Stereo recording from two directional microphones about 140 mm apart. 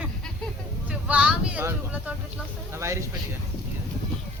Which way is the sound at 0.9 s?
10° right (ahead or behind).